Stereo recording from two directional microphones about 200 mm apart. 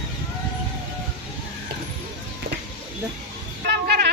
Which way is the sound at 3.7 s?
55° right (ahead or behind).